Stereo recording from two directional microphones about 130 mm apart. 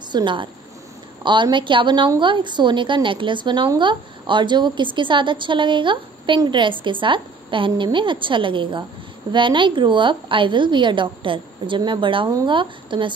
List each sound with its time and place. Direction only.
0.1 s a woman's voice: 40° right (ahead or behind)